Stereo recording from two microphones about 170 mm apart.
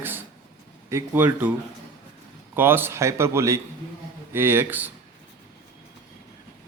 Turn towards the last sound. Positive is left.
turn(degrees=-10)  # may be behind; listen again after turning